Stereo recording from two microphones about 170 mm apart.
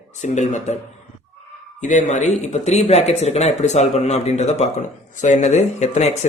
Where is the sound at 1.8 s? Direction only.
45° left (ahead or behind).